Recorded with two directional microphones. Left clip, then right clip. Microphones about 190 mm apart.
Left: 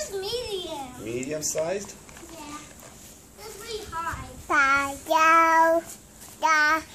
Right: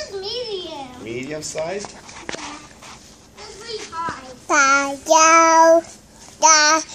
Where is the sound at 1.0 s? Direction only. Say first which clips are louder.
Right 2 dB; 40° left (ahead or behind).